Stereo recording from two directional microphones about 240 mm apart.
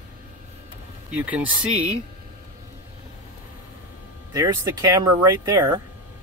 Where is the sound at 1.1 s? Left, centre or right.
Centre.